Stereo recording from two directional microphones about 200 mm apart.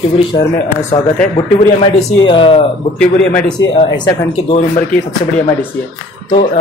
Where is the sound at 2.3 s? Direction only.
25° left (ahead or behind).